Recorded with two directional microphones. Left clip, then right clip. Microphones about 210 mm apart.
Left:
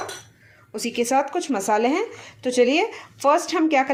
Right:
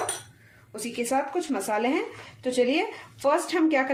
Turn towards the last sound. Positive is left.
turn(degrees=30)  # may be behind; listen again after turning